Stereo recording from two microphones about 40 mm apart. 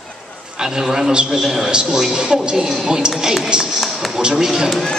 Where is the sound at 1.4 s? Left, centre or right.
Centre.